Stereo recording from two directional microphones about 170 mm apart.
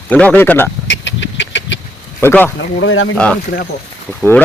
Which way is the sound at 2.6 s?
90° left.